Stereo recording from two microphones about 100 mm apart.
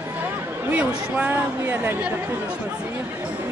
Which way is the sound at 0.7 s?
15° right (ahead or behind).